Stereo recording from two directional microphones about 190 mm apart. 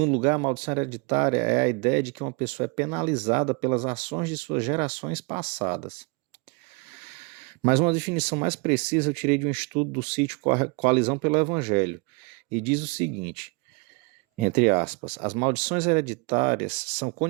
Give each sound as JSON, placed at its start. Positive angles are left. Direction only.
{"t": 0.0, "sound": "speech", "side_deg": -30}
{"t": 7.6, "sound": "speech", "side_deg": -30}
{"t": 14.4, "sound": "speech", "side_deg": -35}